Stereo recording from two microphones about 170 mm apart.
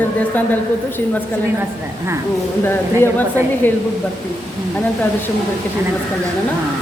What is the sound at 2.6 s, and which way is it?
Speech, 15° left (ahead or behind).